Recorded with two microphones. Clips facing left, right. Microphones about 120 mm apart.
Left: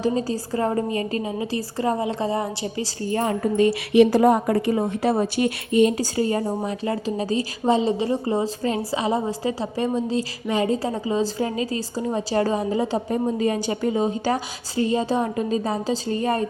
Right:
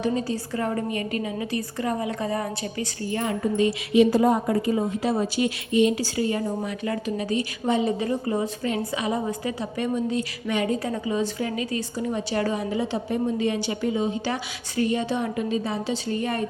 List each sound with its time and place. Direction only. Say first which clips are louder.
0.0 s a woman's voice: left 2 dB; 35° left (ahead or behind)
3.9 s a woman's voice: left 3 dB; 65° left (ahead or behind); by 14.4 s 40° left (ahead or behind)
14.8 s a woman's voice: left 3 dB; 30° left (ahead or behind)